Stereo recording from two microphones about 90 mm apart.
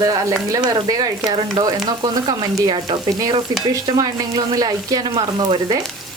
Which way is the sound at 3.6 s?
45° right (ahead or behind).